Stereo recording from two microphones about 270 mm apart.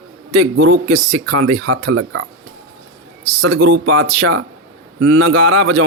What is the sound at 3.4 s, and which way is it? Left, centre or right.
A man's voice, right.